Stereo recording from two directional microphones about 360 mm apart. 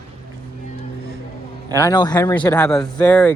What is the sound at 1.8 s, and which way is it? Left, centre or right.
Speech, centre.